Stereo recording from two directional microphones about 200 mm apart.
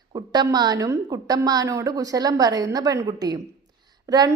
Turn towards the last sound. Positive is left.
turn(degrees=-20)  # may be behind; listen again after turning